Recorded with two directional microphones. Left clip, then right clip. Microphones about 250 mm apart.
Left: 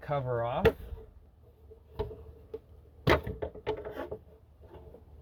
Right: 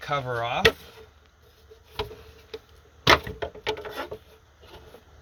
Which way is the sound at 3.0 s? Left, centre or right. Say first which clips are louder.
Right 8 dB; centre.